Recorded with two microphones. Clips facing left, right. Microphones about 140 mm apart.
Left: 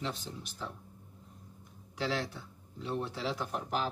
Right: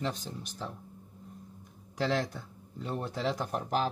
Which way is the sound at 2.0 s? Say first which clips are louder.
Right 4 dB; 45° right (ahead or behind).